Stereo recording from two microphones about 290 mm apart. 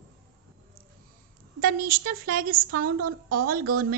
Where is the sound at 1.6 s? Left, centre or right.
Right.